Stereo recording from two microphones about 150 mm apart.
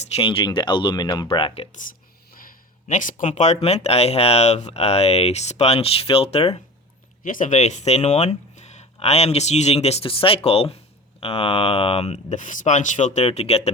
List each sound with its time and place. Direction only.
0.0 s speech: 40° left (ahead or behind)
2.8 s speech: 55° left (ahead or behind)
7.2 s speech: 60° left (ahead or behind); by 13.6 s 45° left (ahead or behind)